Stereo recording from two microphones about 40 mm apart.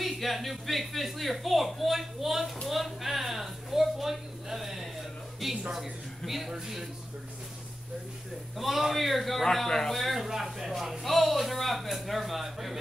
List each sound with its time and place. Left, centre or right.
0.0 s a man's voice: centre
8.5 s a man's voice: centre